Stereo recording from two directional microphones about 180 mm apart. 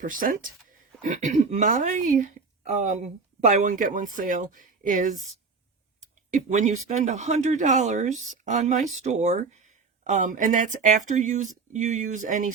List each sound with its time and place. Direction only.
0.0 s speech: 50° right (ahead or behind)